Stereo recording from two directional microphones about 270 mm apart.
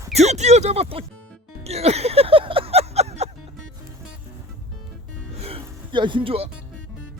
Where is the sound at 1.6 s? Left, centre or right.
Right.